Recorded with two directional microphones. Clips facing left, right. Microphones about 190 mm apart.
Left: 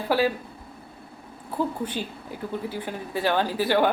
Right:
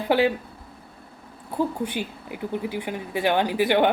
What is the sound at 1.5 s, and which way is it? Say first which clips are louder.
A woman's voice: right 2 dB; 15° right (ahead or behind).